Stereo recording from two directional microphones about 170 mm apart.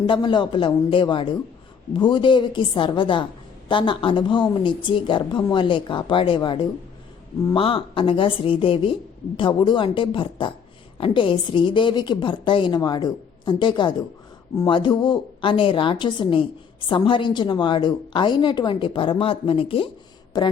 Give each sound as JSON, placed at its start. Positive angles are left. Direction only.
{"t": 0.0, "sound": "a woman's voice", "side_deg": 30}